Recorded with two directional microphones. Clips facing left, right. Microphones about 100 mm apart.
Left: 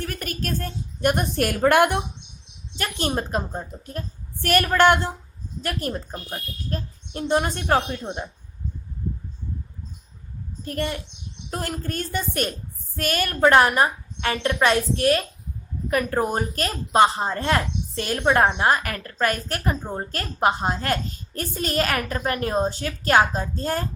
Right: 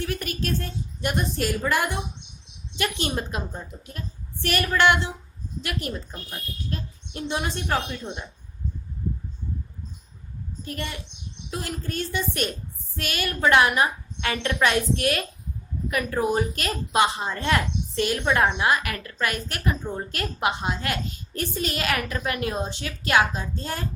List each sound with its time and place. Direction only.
0.0 s a woman's voice: 45° left (ahead or behind); by 2.0 s 60° left (ahead or behind)
2.7 s a woman's voice: 40° left (ahead or behind)
10.7 s a woman's voice: 45° left (ahead or behind)